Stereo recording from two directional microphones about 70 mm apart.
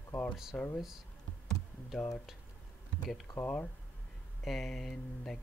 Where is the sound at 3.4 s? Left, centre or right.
Left.